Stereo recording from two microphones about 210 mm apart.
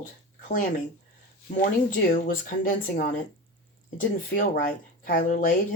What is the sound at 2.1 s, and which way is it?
Speech, 40° left (ahead or behind).